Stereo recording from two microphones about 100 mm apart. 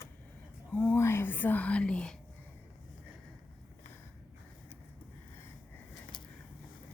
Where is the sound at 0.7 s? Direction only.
15° left (ahead or behind).